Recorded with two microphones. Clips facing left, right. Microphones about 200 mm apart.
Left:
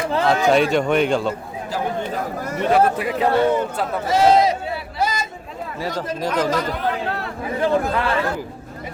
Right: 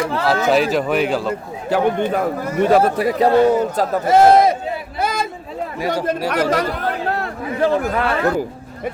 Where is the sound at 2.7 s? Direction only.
40° right (ahead or behind).